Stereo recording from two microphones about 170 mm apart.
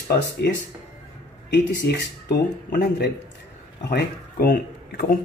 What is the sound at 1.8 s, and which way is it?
Speech, 70° left (ahead or behind).